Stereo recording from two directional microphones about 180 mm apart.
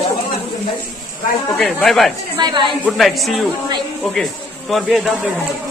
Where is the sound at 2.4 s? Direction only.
25° right (ahead or behind).